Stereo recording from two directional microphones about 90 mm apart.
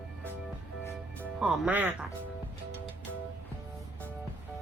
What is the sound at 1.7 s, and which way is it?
Speech, 20° right (ahead or behind).